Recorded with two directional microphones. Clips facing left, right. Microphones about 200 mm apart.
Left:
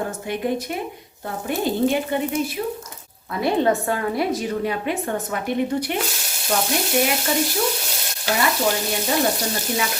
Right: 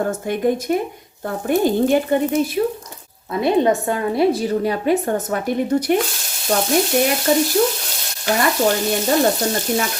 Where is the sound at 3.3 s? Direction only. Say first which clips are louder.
Right 3 dB; 20° right (ahead or behind); by 5.9 s 40° right (ahead or behind).